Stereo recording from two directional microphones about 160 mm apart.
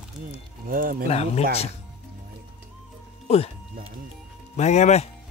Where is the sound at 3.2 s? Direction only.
40° left (ahead or behind).